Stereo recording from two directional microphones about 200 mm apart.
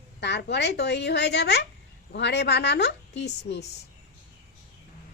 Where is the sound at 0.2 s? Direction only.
60° left (ahead or behind).